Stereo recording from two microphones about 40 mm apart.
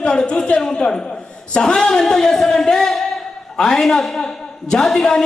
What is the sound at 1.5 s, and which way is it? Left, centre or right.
A woman's voice, centre.